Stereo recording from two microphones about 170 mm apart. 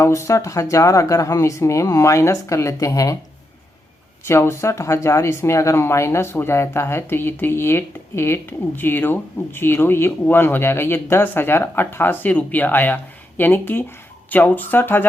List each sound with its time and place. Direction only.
0.0 s speech: 15° left (ahead or behind)
4.3 s speech: 15° left (ahead or behind)